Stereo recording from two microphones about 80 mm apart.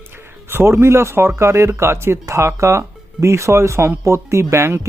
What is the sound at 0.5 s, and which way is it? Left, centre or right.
Speech, right.